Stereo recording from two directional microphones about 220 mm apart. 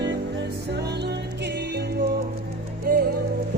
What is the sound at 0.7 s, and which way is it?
Music, 50° right (ahead or behind).